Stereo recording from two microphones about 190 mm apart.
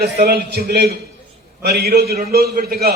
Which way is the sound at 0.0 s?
55° right (ahead or behind).